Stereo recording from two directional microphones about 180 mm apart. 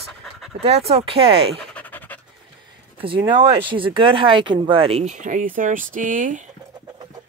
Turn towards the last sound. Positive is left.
turn(degrees=-45)  # may be behind; listen again after turning